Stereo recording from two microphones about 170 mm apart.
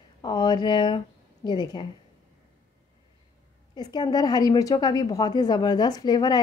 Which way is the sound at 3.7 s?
25° left (ahead or behind).